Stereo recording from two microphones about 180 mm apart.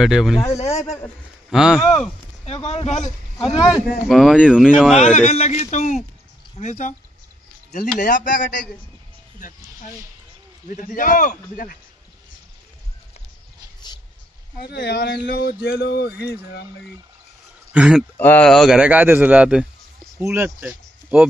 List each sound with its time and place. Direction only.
0.0 s speech: centre (ahead or behind)
0.6 s a man's voice: 40° left (ahead or behind)
1.5 s speech: 5° right (ahead or behind)
2.0 s speech: 35° left (ahead or behind)
4.1 s speech: centre (ahead or behind)
4.9 s a man's voice: 40° left (ahead or behind)
10.7 s a man's voice: 50° left (ahead or behind)
14.6 s speech: 65° left (ahead or behind)
17.7 s speech: 5° right (ahead or behind)
18.1 s speech: 10° left (ahead or behind); by 21.3 s 5° right (ahead or behind)